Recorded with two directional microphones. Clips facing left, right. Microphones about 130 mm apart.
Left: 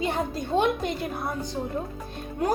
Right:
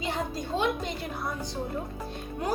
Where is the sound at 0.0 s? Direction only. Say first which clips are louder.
Left 4 dB; 55° left (ahead or behind).